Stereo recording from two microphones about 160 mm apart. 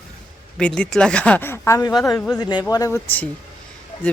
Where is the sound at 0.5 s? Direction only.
5° left (ahead or behind).